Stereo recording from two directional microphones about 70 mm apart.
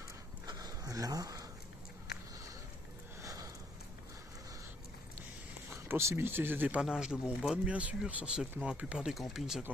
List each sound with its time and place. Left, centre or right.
0.5 s dog: right
3.2 s a sound: right
5.7 s speech: right
6.8 s speech: centre